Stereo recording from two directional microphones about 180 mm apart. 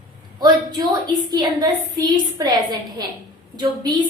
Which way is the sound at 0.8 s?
25° right (ahead or behind).